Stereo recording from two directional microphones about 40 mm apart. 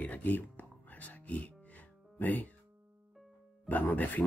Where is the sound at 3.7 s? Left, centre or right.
Left.